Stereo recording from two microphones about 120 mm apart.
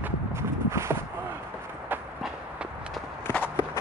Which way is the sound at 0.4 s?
20° right (ahead or behind).